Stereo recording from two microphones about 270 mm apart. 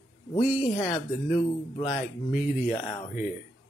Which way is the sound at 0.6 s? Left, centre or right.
Left.